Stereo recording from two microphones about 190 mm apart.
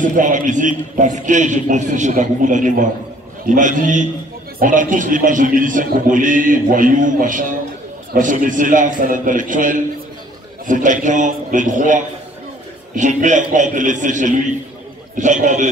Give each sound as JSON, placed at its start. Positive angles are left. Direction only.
{"t": 0.0, "sound": "a man's voice", "side_deg": -40}